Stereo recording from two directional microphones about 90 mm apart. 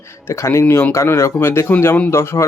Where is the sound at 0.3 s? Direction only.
35° left (ahead or behind).